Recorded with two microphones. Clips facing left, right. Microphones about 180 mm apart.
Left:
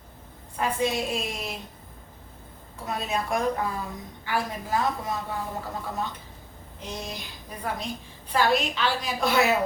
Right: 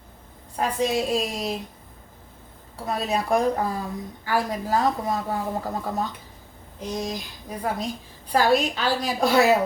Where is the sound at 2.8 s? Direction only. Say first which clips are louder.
Right 4 dB; 35° right (ahead or behind).